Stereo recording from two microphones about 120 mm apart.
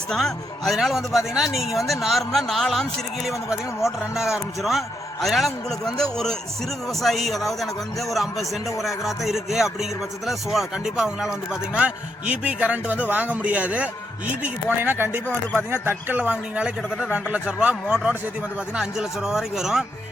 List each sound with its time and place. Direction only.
0.1 s a man's voice: 5° left (ahead or behind)
3.8 s a man's voice: 5° right (ahead or behind)